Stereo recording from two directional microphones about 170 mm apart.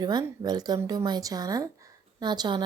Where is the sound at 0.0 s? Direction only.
25° right (ahead or behind).